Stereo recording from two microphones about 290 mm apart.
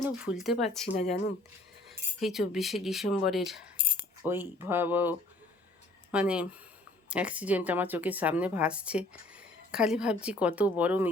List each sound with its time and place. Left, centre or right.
0.0 s speech: centre
2.2 s speech: centre
3.8 s coin: centre
4.2 s speech: centre